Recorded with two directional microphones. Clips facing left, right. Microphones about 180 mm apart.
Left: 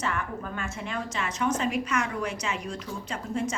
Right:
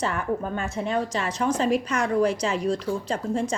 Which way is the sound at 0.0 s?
35° right (ahead or behind).